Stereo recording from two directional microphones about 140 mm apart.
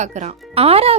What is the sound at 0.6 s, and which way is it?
Speech, 45° right (ahead or behind).